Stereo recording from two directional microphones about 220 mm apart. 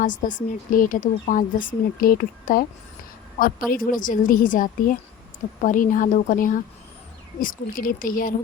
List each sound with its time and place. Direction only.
0.0 s a woman's voice: 35° left (ahead or behind)
3.7 s a woman's voice: 40° left (ahead or behind)